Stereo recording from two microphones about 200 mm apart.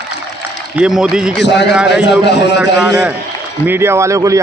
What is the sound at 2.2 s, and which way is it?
Speech, 60° left (ahead or behind).